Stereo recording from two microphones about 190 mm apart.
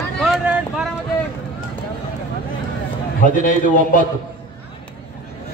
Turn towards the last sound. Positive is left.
turn(degrees=45)  # may be behind; listen again after turning